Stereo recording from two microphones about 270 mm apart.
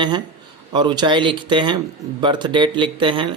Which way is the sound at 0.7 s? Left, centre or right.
Centre.